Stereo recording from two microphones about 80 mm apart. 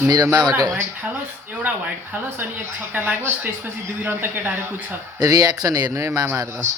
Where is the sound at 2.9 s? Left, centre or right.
Right.